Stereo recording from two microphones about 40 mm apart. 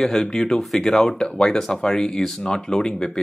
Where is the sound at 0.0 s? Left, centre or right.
Centre.